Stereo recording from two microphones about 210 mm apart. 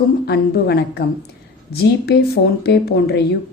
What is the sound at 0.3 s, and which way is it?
Speech, 50° left (ahead or behind).